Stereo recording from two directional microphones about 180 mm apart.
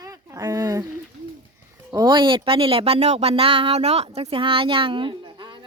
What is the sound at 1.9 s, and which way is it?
Speech, 25° right (ahead or behind).